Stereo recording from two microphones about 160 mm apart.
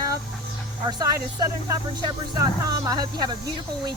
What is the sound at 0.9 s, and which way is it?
Speech, 25° right (ahead or behind).